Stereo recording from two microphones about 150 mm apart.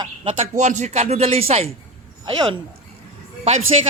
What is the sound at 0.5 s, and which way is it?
Speech, 50° right (ahead or behind).